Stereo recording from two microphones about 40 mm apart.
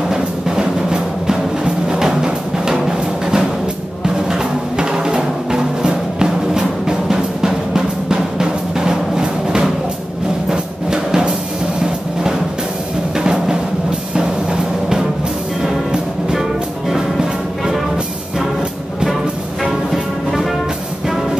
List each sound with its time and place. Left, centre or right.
0.1 s music: centre
16.9 s music: centre